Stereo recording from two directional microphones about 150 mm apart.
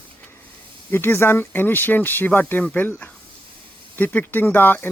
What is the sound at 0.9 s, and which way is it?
Speech, 15° left (ahead or behind).